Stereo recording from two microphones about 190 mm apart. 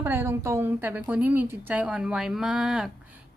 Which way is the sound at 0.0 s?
15° right (ahead or behind).